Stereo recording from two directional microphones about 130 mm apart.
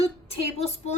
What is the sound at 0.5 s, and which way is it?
Speech, 55° left (ahead or behind).